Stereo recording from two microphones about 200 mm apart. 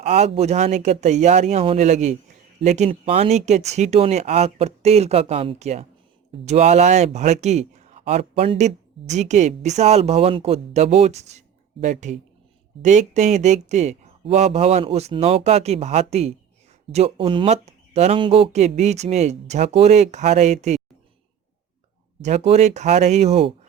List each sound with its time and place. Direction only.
0.0 s speech: 35° right (ahead or behind)
22.2 s speech: 35° right (ahead or behind)